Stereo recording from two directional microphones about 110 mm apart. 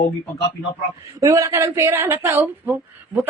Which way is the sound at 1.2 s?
30° right (ahead or behind).